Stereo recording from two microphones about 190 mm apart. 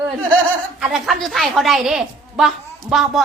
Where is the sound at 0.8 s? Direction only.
5° right (ahead or behind).